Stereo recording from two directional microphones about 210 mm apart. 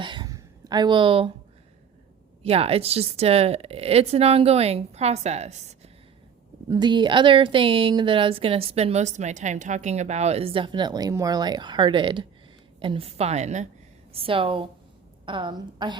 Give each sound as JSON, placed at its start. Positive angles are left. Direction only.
{"t": 0.0, "sound": "a sound", "side_deg": -20}
{"t": 2.4, "sound": "a woman's voice", "side_deg": -30}
{"t": 6.7, "sound": "a woman's voice", "side_deg": -20}